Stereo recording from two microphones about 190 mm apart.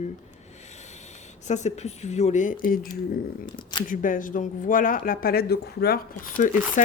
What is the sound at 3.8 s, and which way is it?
A man's voice, 45° left (ahead or behind).